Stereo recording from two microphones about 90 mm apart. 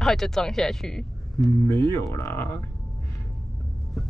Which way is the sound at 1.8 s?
35° left (ahead or behind).